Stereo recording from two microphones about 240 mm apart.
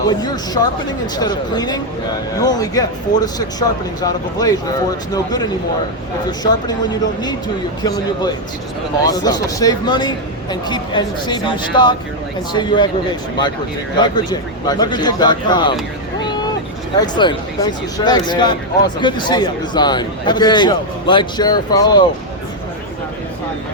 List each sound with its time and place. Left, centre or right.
0.1 s speech: centre
13.9 s speech: centre
17.2 s speech: centre